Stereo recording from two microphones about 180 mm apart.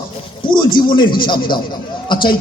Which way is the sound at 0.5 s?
25° left (ahead or behind).